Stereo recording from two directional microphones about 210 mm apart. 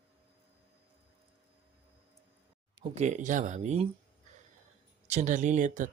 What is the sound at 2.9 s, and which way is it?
Speech, 35° right (ahead or behind).